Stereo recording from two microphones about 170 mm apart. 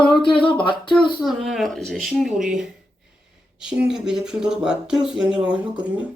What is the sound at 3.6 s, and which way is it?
Speech, 5° right (ahead or behind).